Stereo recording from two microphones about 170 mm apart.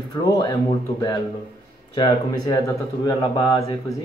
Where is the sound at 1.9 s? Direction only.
25° left (ahead or behind).